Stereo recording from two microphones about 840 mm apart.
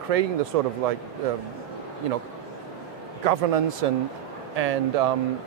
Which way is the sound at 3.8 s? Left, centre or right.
Right.